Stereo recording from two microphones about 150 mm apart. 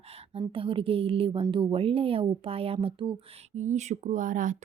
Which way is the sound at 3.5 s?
50° right (ahead or behind).